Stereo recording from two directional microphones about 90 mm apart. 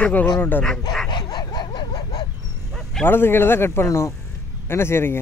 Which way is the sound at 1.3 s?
50° left (ahead or behind).